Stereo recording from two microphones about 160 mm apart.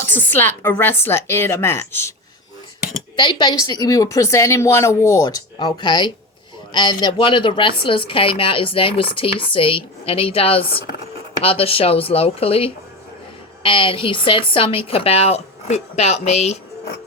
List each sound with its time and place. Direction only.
0.0 s a woman's voice: 10° left (ahead or behind)
3.2 s speech: 25° left (ahead or behind); by 16.6 s 45° left (ahead or behind)